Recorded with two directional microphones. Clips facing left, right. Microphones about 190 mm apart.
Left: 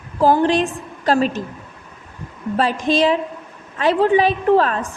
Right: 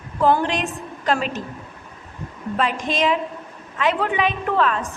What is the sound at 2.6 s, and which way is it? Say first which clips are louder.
A woman's voice: left 5 dB; 35° left (ahead or behind).